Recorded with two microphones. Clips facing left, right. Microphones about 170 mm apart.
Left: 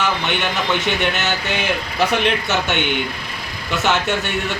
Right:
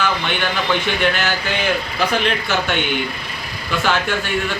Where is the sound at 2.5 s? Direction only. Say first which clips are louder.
Even; 20° left (ahead or behind).